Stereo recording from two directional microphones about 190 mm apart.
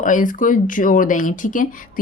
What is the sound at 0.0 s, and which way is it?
Speech, 45° left (ahead or behind).